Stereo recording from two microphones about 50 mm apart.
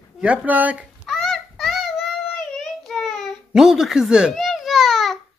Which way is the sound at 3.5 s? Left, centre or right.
Centre.